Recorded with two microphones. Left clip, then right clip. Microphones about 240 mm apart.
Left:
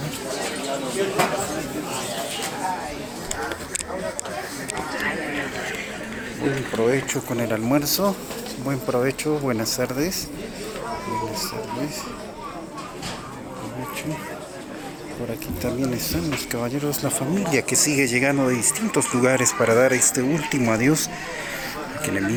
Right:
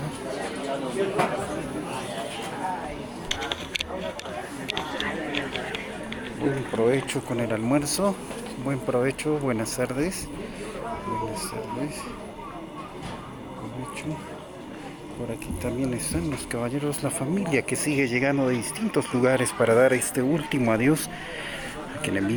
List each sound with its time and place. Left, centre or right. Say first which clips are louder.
0.3 s a sound: left 3 dB; centre
4.7 s chatter: left 3 dB; centre
6.4 s speech: left 2 dB; centre
15.6 s speech: left 4 dB; centre
20.1 s speech: left 3 dB; centre
22.0 s speech: left 2 dB; centre